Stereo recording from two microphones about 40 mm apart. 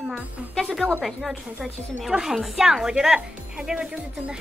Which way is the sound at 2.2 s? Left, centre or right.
Centre.